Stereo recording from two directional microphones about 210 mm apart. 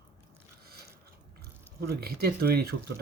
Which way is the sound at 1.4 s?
50° right (ahead or behind).